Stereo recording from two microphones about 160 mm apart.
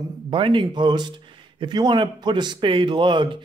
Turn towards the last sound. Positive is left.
turn(degrees=-30)  # may be behind; listen again after turning